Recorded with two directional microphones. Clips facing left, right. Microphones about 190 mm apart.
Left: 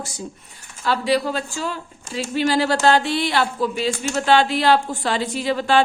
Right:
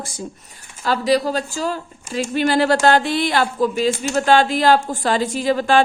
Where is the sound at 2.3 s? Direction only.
55° right (ahead or behind).